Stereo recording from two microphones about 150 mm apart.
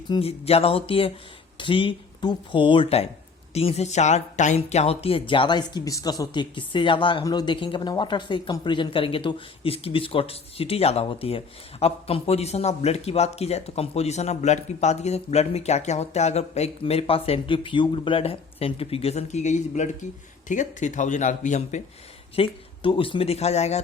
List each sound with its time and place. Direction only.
0.2 s speech: 45° left (ahead or behind)
22.4 s speech: 35° left (ahead or behind)